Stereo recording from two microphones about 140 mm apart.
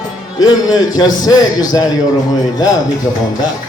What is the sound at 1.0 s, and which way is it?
Speech, 25° left (ahead or behind).